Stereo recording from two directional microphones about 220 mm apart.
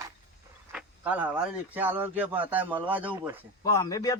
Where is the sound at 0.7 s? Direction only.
5° right (ahead or behind).